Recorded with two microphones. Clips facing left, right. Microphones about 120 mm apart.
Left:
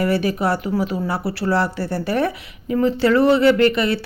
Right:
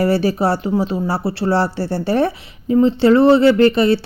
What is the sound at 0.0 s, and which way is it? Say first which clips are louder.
Speech: right 3 dB; 35° right (ahead or behind).